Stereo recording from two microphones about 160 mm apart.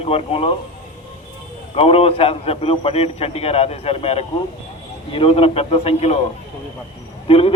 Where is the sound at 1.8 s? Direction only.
35° left (ahead or behind).